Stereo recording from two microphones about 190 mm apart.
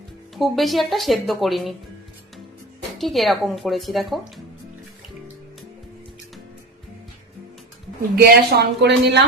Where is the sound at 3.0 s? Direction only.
Centre (ahead or behind).